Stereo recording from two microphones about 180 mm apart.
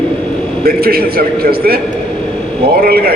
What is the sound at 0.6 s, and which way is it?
A man's voice, 55° right (ahead or behind).